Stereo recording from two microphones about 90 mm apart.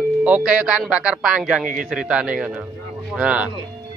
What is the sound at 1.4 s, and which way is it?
Speech, centre (ahead or behind).